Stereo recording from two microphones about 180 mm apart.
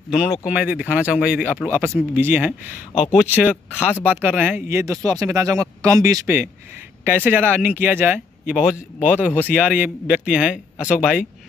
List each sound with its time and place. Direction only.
0.1 s speech: 5° right (ahead or behind)
3.9 s speech: 10° left (ahead or behind)
4.2 s speech: 10° right (ahead or behind)